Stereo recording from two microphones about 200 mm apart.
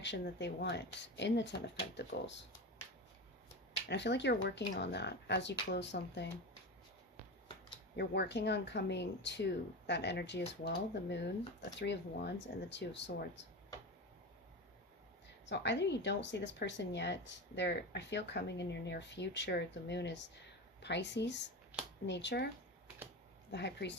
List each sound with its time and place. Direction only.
0.0 s speech: 60° left (ahead or behind)
3.8 s speech: 60° left (ahead or behind)
7.9 s speech: 60° left (ahead or behind)
15.4 s speech: 60° left (ahead or behind)
23.5 s speech: 60° left (ahead or behind)